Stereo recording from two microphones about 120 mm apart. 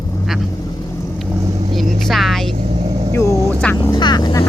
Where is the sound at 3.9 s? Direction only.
40° left (ahead or behind).